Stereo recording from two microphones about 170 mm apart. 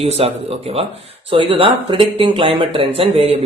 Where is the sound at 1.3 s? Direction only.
30° right (ahead or behind).